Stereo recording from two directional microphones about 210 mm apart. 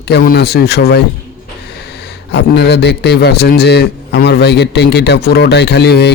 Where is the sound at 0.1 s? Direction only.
50° left (ahead or behind).